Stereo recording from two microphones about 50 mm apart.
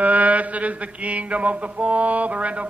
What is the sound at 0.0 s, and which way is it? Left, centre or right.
Mantra, right.